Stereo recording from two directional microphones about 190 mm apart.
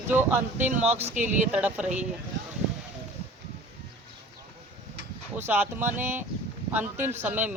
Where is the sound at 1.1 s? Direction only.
40° right (ahead or behind).